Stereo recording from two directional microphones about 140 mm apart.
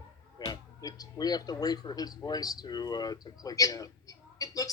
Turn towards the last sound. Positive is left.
turn(degrees=25)  # may be behind; listen again after turning